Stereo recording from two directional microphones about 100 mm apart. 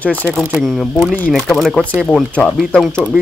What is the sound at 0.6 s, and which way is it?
Speech, centre (ahead or behind).